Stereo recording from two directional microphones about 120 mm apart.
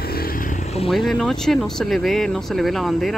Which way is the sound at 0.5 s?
65° left (ahead or behind).